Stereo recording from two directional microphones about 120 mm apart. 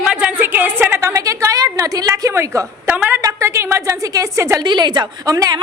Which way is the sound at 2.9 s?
15° right (ahead or behind).